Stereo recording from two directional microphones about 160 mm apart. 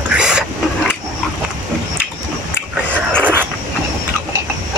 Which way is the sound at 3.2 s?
10° right (ahead or behind).